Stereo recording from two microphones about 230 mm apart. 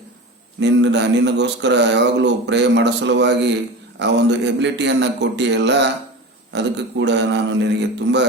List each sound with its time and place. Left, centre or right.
0.6 s speech: right